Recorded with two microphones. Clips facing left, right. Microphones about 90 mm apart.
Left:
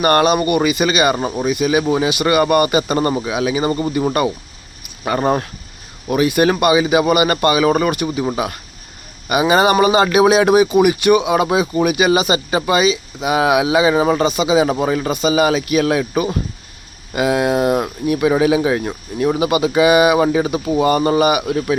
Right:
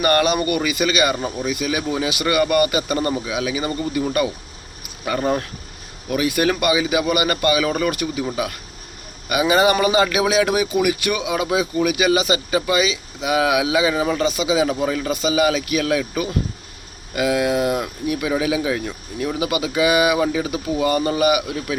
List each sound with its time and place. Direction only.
0.0 s speech: 25° left (ahead or behind)
1.1 s speech: 35° left (ahead or behind)
1.5 s speech: 20° left (ahead or behind)
5.0 s speech: 40° left (ahead or behind)
6.1 s speech: 25° left (ahead or behind)
11.9 s speech: 25° left (ahead or behind)
15.1 s speech: 25° left (ahead or behind); by 19.4 s 40° left (ahead or behind)
19.4 s speech: 30° left (ahead or behind)